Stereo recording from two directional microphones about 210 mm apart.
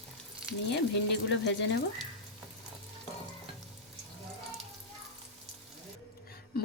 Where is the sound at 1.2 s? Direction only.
55° left (ahead or behind).